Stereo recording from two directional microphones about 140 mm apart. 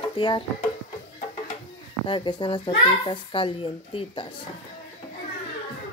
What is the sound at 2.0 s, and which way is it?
A child's voice, 35° left (ahead or behind).